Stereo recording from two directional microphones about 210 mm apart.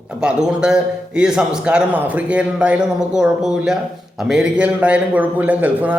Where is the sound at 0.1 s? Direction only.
5° right (ahead or behind).